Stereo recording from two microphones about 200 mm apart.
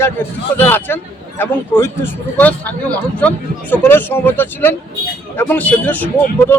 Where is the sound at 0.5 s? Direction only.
10° left (ahead or behind).